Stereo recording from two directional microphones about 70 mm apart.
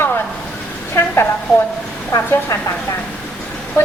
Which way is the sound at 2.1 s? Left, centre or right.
Left.